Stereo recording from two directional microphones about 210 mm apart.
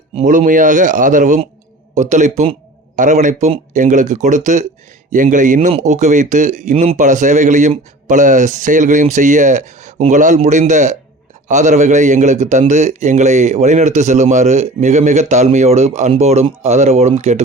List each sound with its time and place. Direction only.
0.2 s a man's voice: 35° right (ahead or behind)